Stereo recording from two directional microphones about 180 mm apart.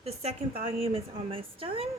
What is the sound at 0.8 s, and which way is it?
A woman's voice, 30° right (ahead or behind).